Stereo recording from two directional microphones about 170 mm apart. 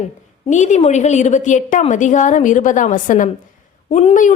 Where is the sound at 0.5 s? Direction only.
45° left (ahead or behind).